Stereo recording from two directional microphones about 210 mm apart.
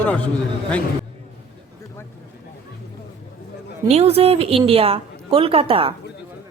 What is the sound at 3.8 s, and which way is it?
A woman's voice, 30° right (ahead or behind).